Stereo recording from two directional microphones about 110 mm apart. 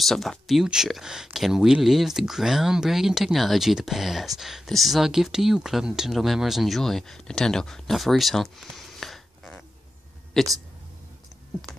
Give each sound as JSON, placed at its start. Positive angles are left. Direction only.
{"t": 0.0, "sound": "speech", "side_deg": 0}